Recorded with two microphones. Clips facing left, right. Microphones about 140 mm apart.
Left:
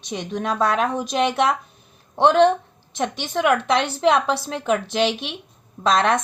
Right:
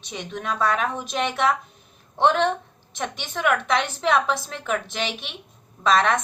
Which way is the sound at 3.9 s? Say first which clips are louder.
Left 3 dB; 30° left (ahead or behind).